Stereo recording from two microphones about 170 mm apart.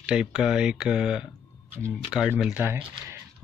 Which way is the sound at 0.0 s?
5° right (ahead or behind).